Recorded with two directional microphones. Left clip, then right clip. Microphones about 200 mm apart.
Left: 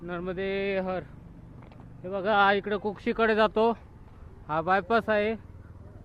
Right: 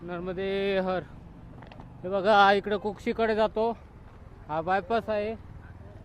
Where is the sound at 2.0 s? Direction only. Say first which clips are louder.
Right 3 dB; 25° right (ahead or behind); by 5.0 s 5° left (ahead or behind).